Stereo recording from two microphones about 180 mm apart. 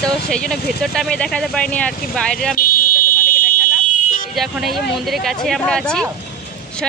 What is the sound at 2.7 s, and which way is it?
Fire alarm, 55° left (ahead or behind).